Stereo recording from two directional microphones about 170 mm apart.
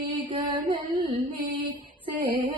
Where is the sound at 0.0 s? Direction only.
30° right (ahead or behind).